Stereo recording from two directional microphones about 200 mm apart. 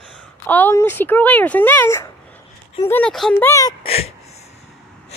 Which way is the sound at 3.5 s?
15° left (ahead or behind).